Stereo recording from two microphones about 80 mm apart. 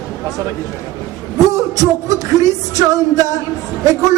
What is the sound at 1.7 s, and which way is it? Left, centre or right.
Music, right.